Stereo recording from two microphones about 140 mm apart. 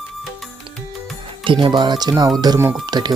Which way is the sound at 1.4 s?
35° right (ahead or behind).